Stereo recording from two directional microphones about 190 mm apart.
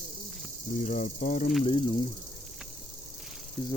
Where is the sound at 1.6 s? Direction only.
25° left (ahead or behind).